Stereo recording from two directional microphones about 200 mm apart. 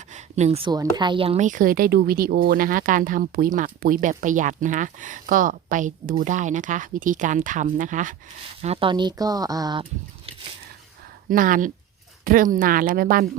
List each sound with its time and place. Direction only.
0.1 s a woman's voice: 35° right (ahead or behind)
8.6 s speech: 30° right (ahead or behind)
11.3 s speech: 45° right (ahead or behind)